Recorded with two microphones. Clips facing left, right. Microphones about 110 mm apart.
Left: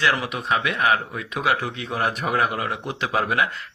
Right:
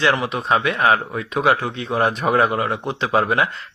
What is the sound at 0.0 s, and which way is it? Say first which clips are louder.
Speech: right 4 dB; 30° right (ahead or behind).